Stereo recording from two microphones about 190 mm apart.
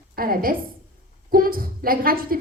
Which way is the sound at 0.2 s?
50° right (ahead or behind).